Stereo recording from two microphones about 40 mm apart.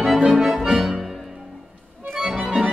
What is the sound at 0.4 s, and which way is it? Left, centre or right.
Accordion, centre.